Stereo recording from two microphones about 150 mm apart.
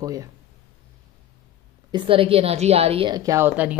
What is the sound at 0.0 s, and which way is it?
Speech, 25° right (ahead or behind).